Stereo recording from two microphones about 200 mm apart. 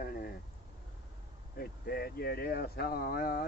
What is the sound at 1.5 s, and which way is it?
Speech, 50° left (ahead or behind).